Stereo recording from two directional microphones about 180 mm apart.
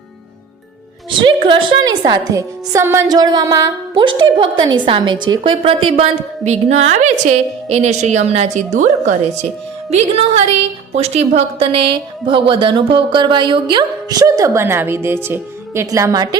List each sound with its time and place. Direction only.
1.3 s a woman's voice: 30° right (ahead or behind)